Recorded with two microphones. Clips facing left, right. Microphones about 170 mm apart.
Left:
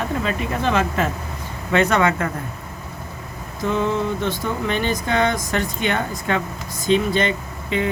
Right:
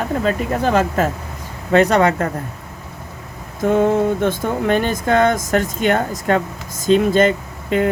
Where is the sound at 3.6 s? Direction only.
50° right (ahead or behind).